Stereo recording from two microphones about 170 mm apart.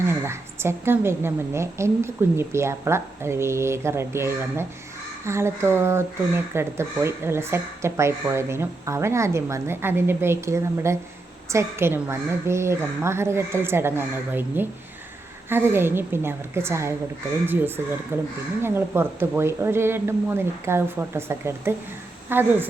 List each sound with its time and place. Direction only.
0.1 s speech: 15° right (ahead or behind)